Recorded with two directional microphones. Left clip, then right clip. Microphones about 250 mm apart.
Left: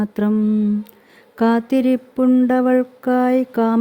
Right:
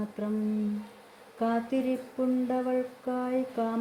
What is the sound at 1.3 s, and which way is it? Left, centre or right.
Mantra, left.